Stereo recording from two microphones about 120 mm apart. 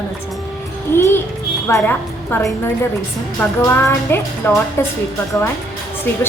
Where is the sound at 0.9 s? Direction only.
20° left (ahead or behind).